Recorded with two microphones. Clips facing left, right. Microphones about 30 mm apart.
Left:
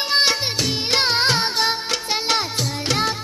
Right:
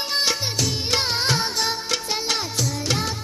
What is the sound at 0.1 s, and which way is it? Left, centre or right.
Music, left.